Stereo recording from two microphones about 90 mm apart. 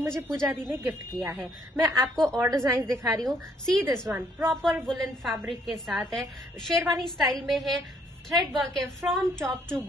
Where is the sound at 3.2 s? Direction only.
Centre (ahead or behind).